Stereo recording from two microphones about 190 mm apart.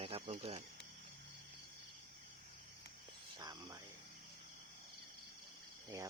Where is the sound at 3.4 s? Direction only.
20° right (ahead or behind).